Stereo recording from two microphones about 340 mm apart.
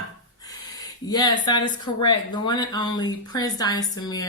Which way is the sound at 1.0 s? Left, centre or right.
Centre.